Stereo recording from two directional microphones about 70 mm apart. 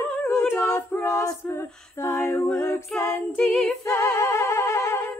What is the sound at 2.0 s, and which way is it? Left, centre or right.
Female singing, left.